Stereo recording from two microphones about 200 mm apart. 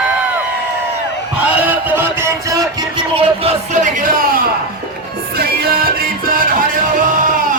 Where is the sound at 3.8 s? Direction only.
45° right (ahead or behind).